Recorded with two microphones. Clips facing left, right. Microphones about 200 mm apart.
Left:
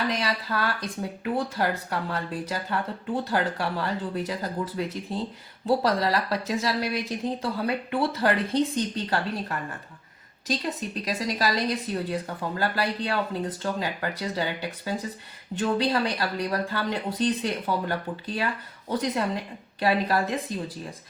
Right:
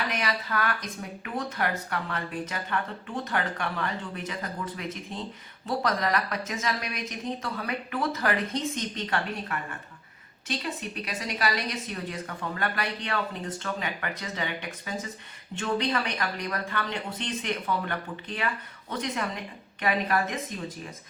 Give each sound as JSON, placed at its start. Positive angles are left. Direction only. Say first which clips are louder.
{"t": 0.1, "sound": "speech", "louder": "left 2 dB", "side_deg": 35}